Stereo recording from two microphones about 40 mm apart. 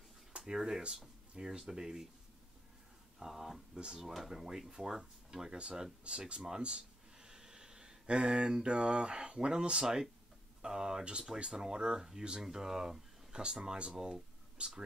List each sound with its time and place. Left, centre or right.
0.4 s speech: centre
3.2 s speech: centre
3.7 s speech: centre
4.0 s speech: centre; by 6.4 s right
6.6 s a sound: centre
8.6 s speech: right
13.4 s speech: right
13.9 s a sound: centre